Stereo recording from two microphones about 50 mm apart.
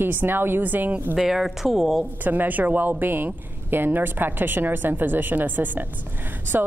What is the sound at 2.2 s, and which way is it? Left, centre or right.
A man's voice, right.